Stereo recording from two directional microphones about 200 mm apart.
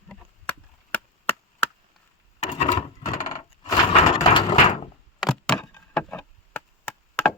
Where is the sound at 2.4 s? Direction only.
30° left (ahead or behind).